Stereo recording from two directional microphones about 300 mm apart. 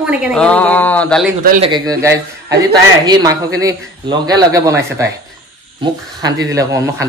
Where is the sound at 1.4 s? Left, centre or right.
Right.